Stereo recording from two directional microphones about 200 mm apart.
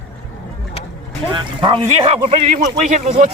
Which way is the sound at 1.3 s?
25° right (ahead or behind).